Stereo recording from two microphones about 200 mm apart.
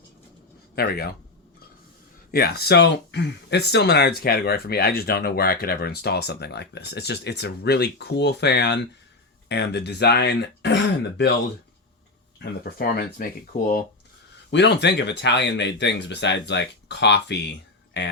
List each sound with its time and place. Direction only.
0.8 s speech: 50° left (ahead or behind)
2.3 s speech: 50° left (ahead or behind)
12.4 s speech: 50° left (ahead or behind)
14.5 s speech: 60° left (ahead or behind)